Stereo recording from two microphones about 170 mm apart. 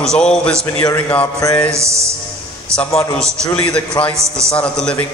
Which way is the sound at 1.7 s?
15° right (ahead or behind).